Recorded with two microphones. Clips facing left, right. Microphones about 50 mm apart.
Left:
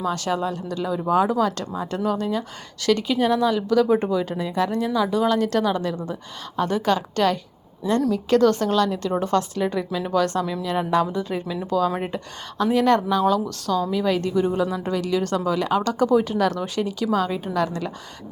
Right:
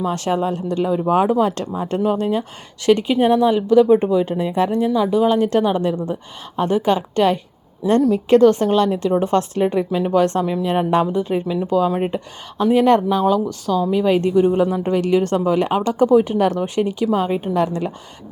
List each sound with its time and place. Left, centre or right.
0.0 s a woman's voice: right
14.6 s a woman's voice: right